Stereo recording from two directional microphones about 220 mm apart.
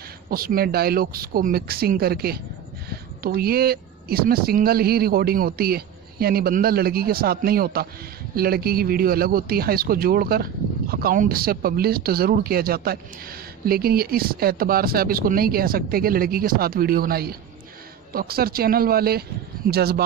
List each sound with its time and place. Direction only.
0.3 s speech: 40° right (ahead or behind)